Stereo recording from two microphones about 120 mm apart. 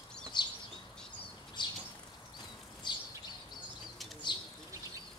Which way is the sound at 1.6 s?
40° left (ahead or behind).